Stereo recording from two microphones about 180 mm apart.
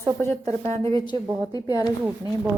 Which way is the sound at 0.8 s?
25° left (ahead or behind).